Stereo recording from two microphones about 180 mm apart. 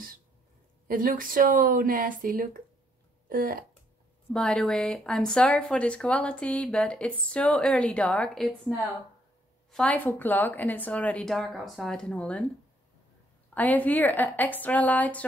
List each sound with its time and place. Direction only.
0.8 s speech: 50° right (ahead or behind)
4.3 s a woman's voice: 5° left (ahead or behind)
13.6 s a woman's voice: 10° left (ahead or behind)